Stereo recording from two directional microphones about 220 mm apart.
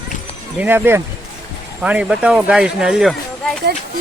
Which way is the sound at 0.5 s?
10° right (ahead or behind).